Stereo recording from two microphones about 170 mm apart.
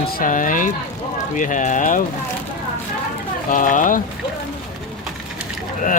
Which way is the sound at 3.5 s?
50° left (ahead or behind).